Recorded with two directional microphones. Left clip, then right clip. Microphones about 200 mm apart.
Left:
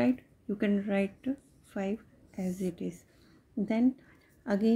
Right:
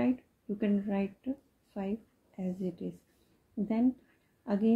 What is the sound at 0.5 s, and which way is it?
Speech, 25° left (ahead or behind).